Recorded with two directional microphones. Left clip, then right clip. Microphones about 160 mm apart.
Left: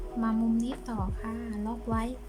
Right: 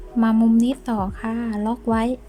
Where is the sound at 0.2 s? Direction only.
55° right (ahead or behind).